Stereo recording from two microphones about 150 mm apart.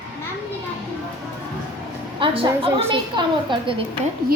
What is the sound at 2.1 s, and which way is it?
A woman's voice, 35° right (ahead or behind).